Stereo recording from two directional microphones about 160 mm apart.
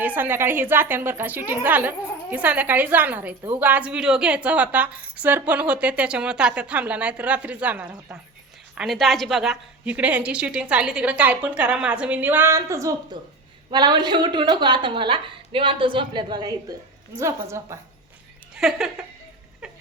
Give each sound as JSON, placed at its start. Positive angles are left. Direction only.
{"t": 0.0, "sound": "a woman's voice", "side_deg": -10}
{"t": 18.5, "sound": "speech", "side_deg": 0}